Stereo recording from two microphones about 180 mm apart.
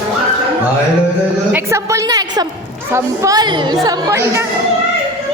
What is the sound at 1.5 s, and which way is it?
A woman's voice, 15° right (ahead or behind).